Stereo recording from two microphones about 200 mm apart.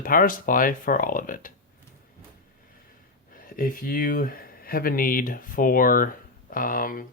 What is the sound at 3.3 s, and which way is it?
Speech, 45° left (ahead or behind).